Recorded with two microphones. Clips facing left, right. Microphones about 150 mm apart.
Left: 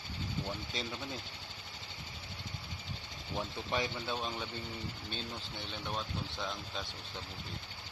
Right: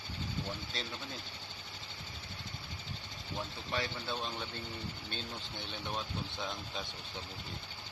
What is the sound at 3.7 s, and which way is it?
Speech, 15° left (ahead or behind).